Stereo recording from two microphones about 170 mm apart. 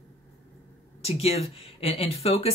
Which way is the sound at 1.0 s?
35° left (ahead or behind).